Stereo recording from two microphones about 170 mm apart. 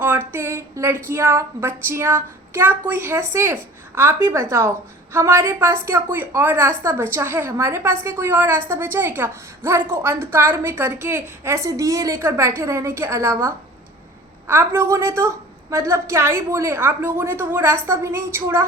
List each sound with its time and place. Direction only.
0.0 s a woman's voice: 15° right (ahead or behind)